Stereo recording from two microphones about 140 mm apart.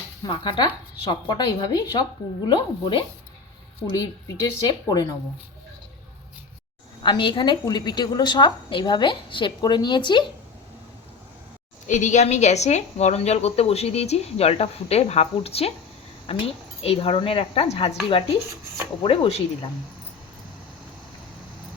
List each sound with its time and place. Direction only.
0.3 s a woman's voice: 35° left (ahead or behind)
7.0 s a woman's voice: 35° left (ahead or behind)
11.9 s a woman's voice: 60° left (ahead or behind); by 19.4 s 40° left (ahead or behind)